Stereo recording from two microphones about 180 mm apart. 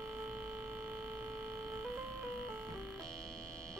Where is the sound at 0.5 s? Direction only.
15° right (ahead or behind).